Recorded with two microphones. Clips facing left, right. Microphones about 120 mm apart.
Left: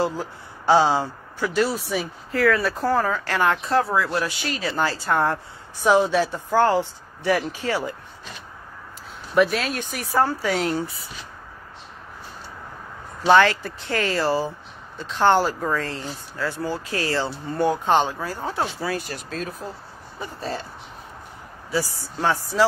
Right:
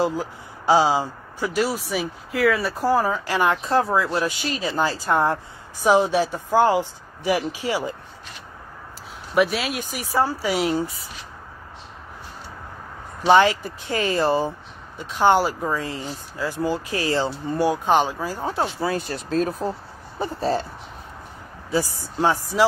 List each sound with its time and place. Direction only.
0.0 s speech: 10° right (ahead or behind)
9.3 s speech: 5° right (ahead or behind)
10.4 s speech: 10° right (ahead or behind)
13.3 s speech: 15° right (ahead or behind)
18.8 s speech: 25° right (ahead or behind)
21.6 s speech: 20° right (ahead or behind)